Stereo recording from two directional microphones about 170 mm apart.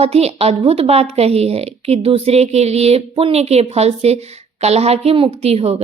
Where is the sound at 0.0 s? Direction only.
35° right (ahead or behind).